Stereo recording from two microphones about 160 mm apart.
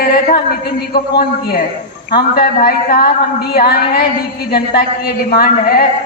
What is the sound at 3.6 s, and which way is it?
Speech, 70° left (ahead or behind).